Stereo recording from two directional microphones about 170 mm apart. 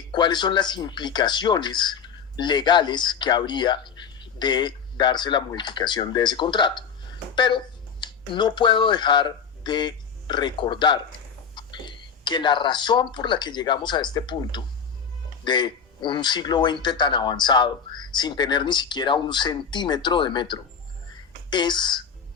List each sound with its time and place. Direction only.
0.1 s speech: 25° left (ahead or behind)